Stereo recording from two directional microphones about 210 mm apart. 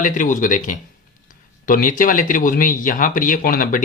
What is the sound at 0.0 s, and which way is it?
Speech, 40° left (ahead or behind).